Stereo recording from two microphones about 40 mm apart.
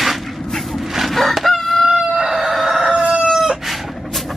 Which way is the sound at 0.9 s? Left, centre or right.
Centre.